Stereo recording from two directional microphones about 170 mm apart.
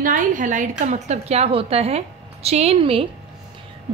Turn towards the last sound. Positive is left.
turn(degrees=-35)  # may be behind; listen again after turning